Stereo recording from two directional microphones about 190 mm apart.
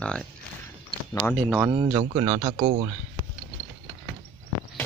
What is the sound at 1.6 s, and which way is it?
Speech, 20° right (ahead or behind).